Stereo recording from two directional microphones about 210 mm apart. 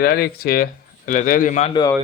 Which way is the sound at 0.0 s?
45° left (ahead or behind).